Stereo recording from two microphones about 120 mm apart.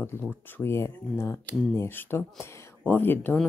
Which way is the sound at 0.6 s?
20° left (ahead or behind).